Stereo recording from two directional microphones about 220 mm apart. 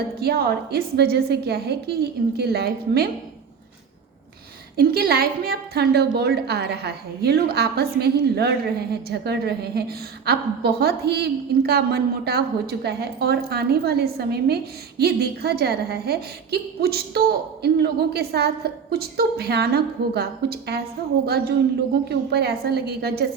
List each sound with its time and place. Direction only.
0.2 s a woman's voice: 45° right (ahead or behind)
4.8 s a woman's voice: 45° right (ahead or behind)
22.1 s a woman's voice: 45° right (ahead or behind)